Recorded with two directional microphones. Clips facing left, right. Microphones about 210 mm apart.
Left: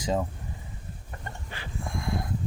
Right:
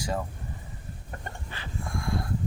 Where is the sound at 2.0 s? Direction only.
20° left (ahead or behind).